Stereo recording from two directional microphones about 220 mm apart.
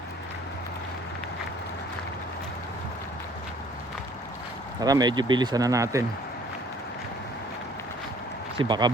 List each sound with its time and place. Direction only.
4.8 s speech: 15° right (ahead or behind)
8.5 s speech: 20° right (ahead or behind)